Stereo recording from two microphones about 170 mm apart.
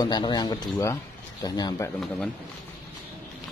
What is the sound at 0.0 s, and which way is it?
Speech, 25° left (ahead or behind).